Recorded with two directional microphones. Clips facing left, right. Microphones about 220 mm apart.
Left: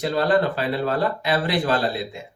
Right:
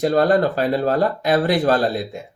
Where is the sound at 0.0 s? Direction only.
45° right (ahead or behind).